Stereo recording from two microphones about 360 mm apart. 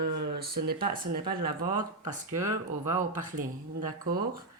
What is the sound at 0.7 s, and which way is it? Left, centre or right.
Speech, centre.